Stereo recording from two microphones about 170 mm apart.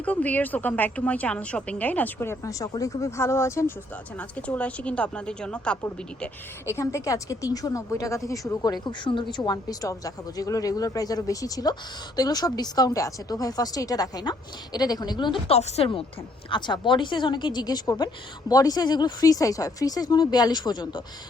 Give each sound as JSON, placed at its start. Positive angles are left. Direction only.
{"t": 0.0, "sound": "a woman's voice", "side_deg": 10}
{"t": 6.7, "sound": "a woman's voice", "side_deg": 15}